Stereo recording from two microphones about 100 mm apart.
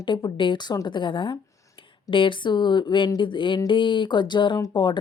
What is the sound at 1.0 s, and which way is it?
Speech, 55° left (ahead or behind).